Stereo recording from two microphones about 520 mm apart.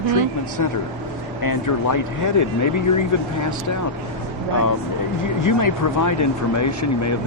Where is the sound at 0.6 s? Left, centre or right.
Left.